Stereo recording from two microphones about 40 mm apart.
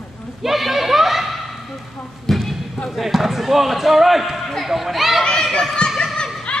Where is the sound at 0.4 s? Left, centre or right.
Centre.